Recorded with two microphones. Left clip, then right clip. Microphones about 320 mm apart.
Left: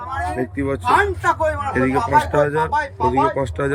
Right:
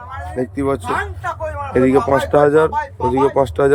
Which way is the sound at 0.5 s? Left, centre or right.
Centre.